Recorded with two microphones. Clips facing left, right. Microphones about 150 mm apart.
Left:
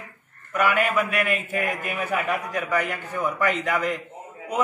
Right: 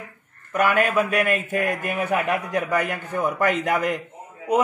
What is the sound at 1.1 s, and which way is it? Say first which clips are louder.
Speech: right 3 dB; 45° right (ahead or behind).